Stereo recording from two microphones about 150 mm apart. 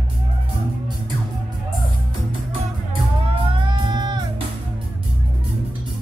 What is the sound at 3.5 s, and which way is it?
Music, 30° right (ahead or behind).